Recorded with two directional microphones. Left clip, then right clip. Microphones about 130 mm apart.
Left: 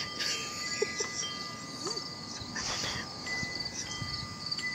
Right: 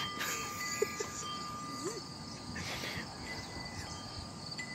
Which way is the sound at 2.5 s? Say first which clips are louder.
Left 6 dB; 20° right (ahead or behind).